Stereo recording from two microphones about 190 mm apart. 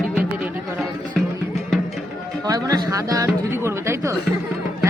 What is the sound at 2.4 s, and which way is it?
Music, 20° right (ahead or behind).